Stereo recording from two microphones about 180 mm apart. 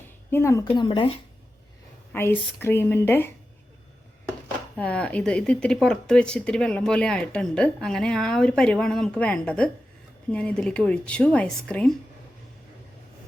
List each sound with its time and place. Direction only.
0.3 s speech: 15° left (ahead or behind)
0.7 s speech: 30° left (ahead or behind)
2.1 s speech: 15° left (ahead or behind)
4.8 s speech: 5° left (ahead or behind)